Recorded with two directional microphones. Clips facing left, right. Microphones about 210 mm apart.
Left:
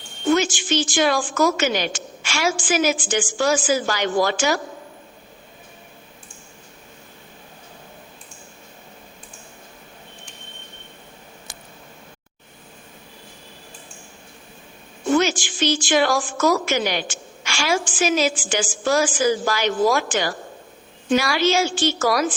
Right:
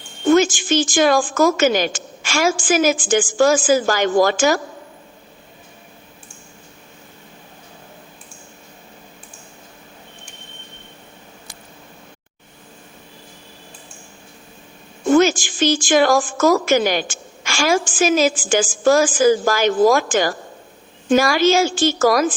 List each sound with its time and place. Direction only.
0.3 s a woman's voice: 45° right (ahead or behind)
15.0 s a woman's voice: 45° right (ahead or behind)